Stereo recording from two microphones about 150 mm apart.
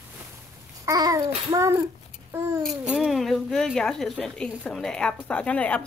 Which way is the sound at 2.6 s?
5° right (ahead or behind).